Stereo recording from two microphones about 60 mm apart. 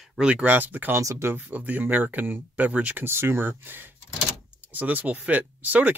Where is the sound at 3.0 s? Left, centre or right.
Right.